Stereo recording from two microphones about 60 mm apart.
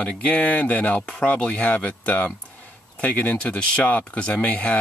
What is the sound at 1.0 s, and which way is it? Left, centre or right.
Speech, centre.